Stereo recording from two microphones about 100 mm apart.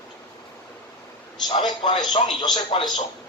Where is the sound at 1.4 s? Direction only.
55° left (ahead or behind).